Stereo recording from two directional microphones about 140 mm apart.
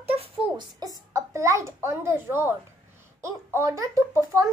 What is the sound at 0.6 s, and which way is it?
A child's voice, 30° right (ahead or behind).